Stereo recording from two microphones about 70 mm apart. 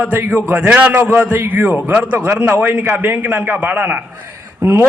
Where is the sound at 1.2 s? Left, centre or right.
Right.